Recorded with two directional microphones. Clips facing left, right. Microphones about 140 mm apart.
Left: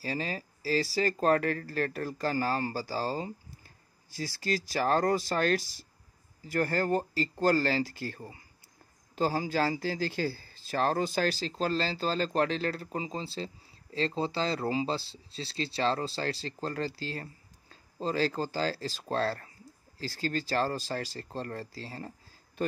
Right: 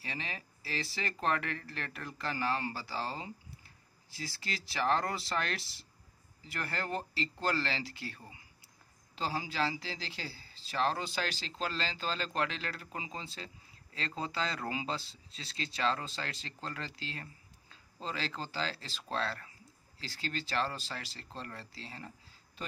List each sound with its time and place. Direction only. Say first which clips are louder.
0.0 s speech: left 8 dB; 40° left (ahead or behind)